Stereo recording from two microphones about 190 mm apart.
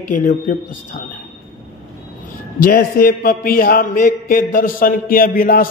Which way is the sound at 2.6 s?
50° left (ahead or behind).